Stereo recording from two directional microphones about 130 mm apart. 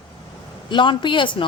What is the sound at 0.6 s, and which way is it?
Speech, 35° left (ahead or behind).